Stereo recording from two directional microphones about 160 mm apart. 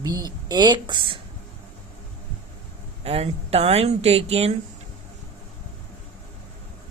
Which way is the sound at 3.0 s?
40° right (ahead or behind).